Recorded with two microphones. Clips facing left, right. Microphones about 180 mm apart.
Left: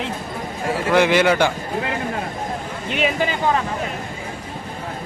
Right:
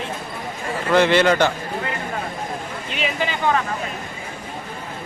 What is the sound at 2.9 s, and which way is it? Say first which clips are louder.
Speech: left 4 dB; 50° left (ahead or behind).